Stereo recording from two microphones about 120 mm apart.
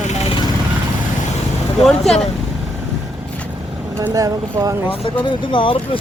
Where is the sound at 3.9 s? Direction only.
25° right (ahead or behind).